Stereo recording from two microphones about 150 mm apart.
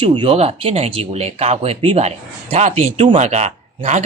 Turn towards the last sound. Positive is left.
turn(degrees=-50)  # may be behind; listen again after turning